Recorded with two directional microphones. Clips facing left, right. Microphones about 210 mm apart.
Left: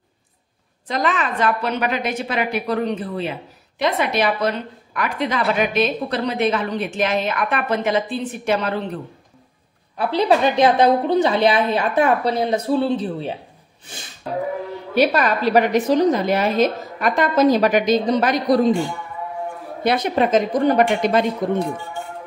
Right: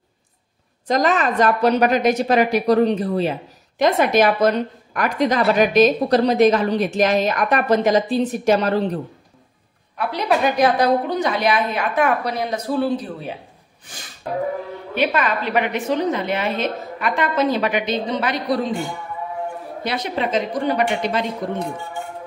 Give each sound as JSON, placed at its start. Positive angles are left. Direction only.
{"t": 0.8, "sound": "a woman's voice", "side_deg": -40}
{"t": 9.9, "sound": "a woman's voice", "side_deg": 30}
{"t": 15.0, "sound": "a woman's voice", "side_deg": 40}
{"t": 19.8, "sound": "a woman's voice", "side_deg": 50}